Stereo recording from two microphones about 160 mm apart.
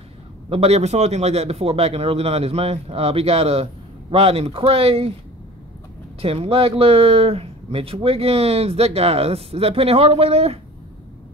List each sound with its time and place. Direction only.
0.5 s speech: 40° right (ahead or behind)
6.2 s speech: 40° right (ahead or behind)